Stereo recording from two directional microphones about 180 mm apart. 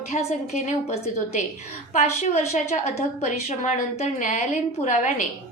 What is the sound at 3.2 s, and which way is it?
A woman's voice, 40° left (ahead or behind).